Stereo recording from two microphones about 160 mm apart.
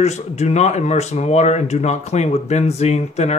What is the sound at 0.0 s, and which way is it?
Speech, 45° left (ahead or behind).